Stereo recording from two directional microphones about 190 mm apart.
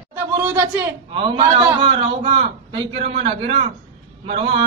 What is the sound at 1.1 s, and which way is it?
A man's voice, 25° right (ahead or behind).